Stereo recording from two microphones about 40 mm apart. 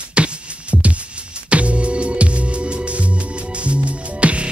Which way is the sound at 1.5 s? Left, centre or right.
Right.